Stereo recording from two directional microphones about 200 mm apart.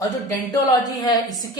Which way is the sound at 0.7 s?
20° left (ahead or behind).